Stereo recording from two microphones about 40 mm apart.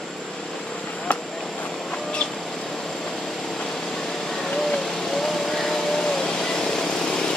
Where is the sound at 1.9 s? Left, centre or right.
Left.